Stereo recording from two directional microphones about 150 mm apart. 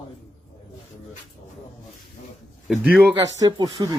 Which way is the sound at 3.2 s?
25° right (ahead or behind).